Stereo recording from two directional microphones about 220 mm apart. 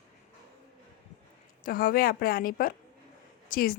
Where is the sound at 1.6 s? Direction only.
40° left (ahead or behind).